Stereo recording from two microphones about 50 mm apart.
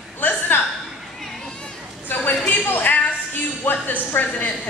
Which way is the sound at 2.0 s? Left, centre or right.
Left.